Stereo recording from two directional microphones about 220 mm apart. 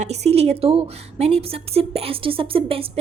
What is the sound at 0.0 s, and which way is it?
A woman's voice, 30° right (ahead or behind).